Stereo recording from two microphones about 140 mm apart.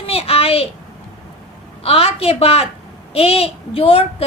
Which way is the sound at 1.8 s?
45° left (ahead or behind).